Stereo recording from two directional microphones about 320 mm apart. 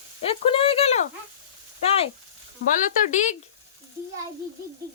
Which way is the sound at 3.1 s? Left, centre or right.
Left.